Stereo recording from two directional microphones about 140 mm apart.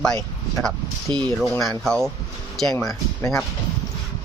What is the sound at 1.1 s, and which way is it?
Speech, 35° right (ahead or behind).